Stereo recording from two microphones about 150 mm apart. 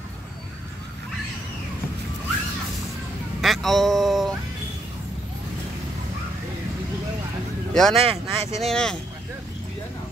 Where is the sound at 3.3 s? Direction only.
Centre (ahead or behind).